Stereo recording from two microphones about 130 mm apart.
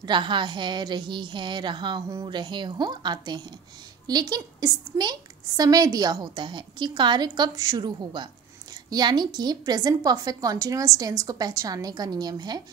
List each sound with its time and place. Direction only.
0.0 s a woman's voice: 35° right (ahead or behind)